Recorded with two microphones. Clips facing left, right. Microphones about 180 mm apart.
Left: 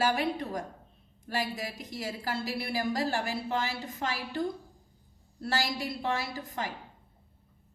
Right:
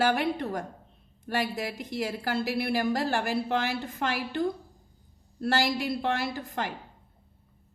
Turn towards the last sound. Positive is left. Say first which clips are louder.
# right 4 dB
turn(degrees=-60)  # may be behind; listen again after turning